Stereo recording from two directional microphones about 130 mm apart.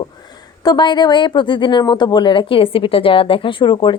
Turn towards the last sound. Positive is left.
turn(degrees=40)  # may be behind; listen again after turning